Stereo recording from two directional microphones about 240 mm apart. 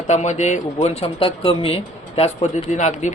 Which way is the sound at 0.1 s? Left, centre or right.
Left.